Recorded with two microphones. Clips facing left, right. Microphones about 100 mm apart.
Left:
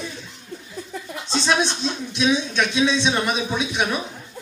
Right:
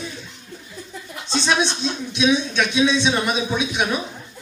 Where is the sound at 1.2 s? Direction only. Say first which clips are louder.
Right 1 dB; centre (ahead or behind).